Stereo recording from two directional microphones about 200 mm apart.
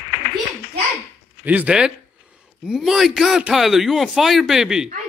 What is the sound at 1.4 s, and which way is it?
Speech, 5° right (ahead or behind).